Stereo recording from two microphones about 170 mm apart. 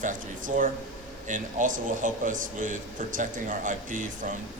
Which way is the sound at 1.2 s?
50° right (ahead or behind).